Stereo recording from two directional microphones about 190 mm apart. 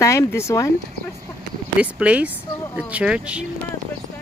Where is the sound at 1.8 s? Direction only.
5° right (ahead or behind).